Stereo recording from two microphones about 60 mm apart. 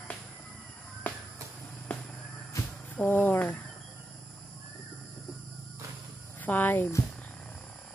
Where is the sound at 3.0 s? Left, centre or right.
Left.